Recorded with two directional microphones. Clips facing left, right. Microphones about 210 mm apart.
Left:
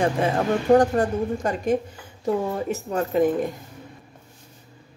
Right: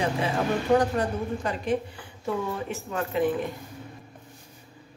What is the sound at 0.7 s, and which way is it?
A woman's voice, 45° left (ahead or behind).